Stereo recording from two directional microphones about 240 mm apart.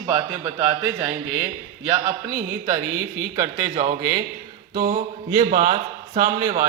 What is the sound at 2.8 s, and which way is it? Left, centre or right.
Speech, right.